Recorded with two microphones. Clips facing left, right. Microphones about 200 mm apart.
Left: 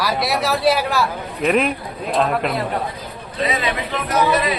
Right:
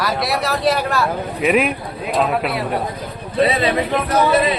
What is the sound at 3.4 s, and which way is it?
Speech, 35° right (ahead or behind).